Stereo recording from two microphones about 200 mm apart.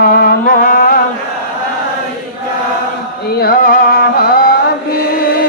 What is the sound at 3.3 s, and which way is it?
Music, 50° left (ahead or behind).